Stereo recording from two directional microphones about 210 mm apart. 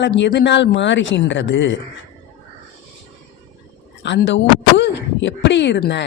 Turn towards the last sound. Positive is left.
turn(degrees=55)  # may be behind; listen again after turning